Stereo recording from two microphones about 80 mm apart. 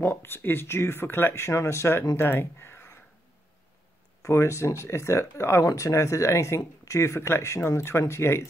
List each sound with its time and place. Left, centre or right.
0.0 s speech: left
4.2 s speech: left
5.6 s speech: left